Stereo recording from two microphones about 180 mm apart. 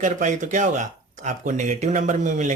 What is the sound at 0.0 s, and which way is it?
Speech, 45° right (ahead or behind).